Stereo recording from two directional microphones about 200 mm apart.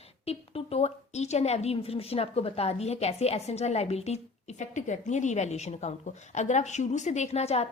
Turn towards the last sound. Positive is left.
turn(degrees=30)  # may be behind; listen again after turning